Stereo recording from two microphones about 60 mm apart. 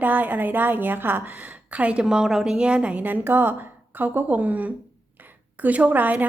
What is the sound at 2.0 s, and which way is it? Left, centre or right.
A woman's voice, centre.